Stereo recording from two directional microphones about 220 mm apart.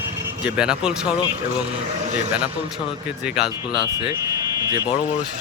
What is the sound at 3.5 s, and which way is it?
Speech, 20° left (ahead or behind).